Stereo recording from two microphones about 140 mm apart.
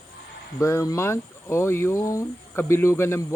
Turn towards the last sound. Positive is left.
turn(degrees=20)  # may be behind; listen again after turning